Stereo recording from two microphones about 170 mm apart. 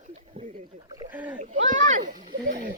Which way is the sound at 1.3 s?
50° right (ahead or behind).